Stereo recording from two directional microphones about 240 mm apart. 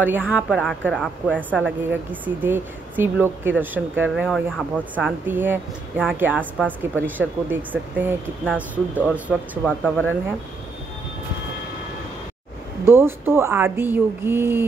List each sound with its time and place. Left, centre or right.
0.0 s a woman's voice: centre
9.7 s a woman's voice: centre
12.8 s speech: centre